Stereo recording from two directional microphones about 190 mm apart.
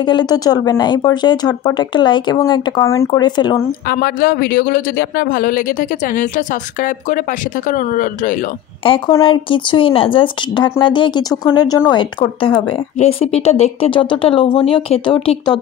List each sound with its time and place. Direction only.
0.0 s speech: 25° left (ahead or behind)
3.9 s speech: 50° left (ahead or behind)
8.8 s speech: 30° left (ahead or behind)